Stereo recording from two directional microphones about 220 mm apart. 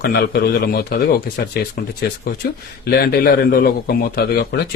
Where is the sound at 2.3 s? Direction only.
40° left (ahead or behind).